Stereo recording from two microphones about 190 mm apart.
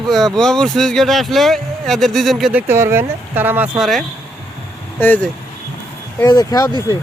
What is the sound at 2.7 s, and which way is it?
Speech, 15° right (ahead or behind).